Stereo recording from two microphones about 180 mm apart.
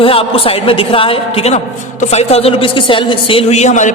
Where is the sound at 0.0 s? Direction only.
30° left (ahead or behind).